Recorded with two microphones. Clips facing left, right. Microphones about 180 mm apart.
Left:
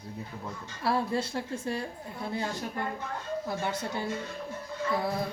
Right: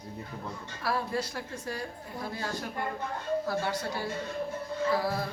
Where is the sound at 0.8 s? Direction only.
25° left (ahead or behind).